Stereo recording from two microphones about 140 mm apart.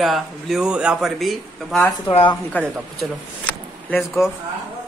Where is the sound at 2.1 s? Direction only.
40° left (ahead or behind).